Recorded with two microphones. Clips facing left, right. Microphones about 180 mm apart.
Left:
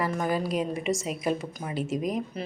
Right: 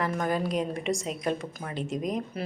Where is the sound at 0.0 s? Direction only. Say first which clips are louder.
Left 1 dB; 5° left (ahead or behind).